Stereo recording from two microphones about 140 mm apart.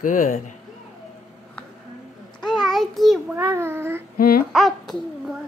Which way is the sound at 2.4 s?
Centre (ahead or behind).